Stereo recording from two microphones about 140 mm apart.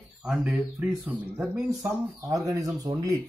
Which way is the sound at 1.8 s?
25° right (ahead or behind).